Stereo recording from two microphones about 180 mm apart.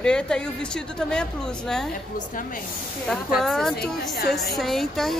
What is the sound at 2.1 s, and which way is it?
Speech, 50° left (ahead or behind).